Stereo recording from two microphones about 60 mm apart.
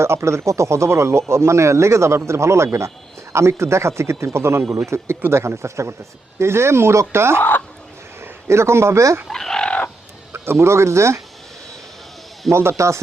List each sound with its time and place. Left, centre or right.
0.0 s speech: right
9.3 s fowl: centre
9.6 s bird: left
10.3 s speech: right
12.5 s speech: right